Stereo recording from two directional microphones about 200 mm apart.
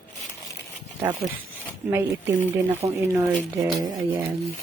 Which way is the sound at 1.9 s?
15° right (ahead or behind).